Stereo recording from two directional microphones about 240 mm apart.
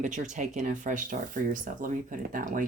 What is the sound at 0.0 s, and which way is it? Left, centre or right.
Speech, right.